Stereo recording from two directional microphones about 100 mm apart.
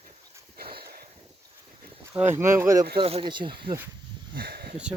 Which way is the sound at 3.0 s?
70° right (ahead or behind).